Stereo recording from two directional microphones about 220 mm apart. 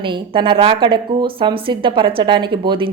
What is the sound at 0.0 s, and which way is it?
A woman's voice, 20° right (ahead or behind).